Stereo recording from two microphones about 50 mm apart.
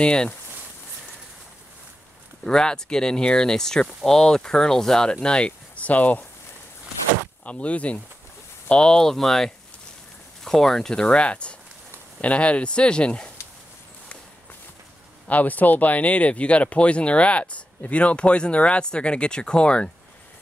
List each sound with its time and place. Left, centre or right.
0.0 s speech: centre
2.4 s speech: centre
5.8 s speech: left
7.4 s speech: left; by 11.1 s centre
11.1 s speech: left
15.2 s speech: left